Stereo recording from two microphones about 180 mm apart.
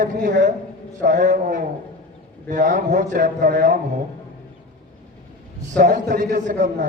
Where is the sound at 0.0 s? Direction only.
45° right (ahead or behind).